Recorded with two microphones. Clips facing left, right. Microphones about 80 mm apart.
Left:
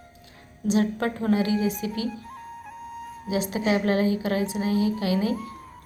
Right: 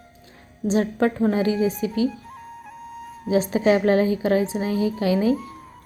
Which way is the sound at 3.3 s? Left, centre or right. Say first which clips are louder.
Right 6 dB; right.